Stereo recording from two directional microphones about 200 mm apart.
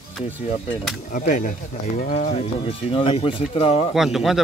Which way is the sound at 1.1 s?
40° left (ahead or behind).